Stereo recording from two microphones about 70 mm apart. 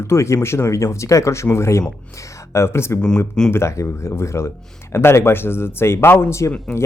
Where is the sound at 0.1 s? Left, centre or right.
Left.